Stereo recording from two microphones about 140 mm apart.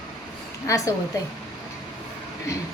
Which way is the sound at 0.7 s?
20° left (ahead or behind).